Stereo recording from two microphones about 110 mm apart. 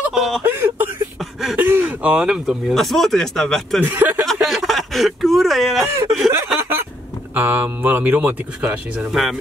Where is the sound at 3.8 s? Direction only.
15° right (ahead or behind).